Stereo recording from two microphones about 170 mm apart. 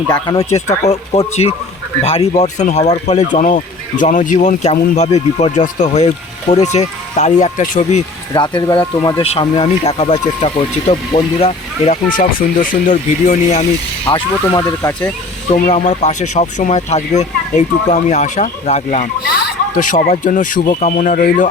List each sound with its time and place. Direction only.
0.1 s speech: 25° left (ahead or behind)
0.9 s speech: 40° left (ahead or behind)
8.3 s speech: 25° left (ahead or behind)
9.3 s speech: 40° left (ahead or behind)
12.0 s speech: 55° left (ahead or behind)
14.0 s speech: 25° left (ahead or behind)
15.5 s speech: 45° left (ahead or behind)